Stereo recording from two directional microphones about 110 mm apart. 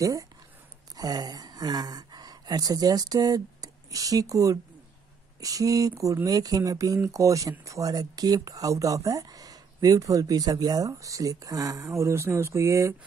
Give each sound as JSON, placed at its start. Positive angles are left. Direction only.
{"t": 0.0, "sound": "speech", "side_deg": -30}